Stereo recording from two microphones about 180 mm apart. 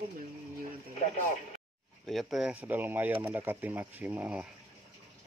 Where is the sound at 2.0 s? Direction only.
Centre (ahead or behind).